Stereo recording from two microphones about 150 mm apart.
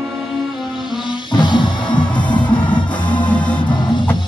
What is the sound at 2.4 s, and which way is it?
Music, 10° left (ahead or behind).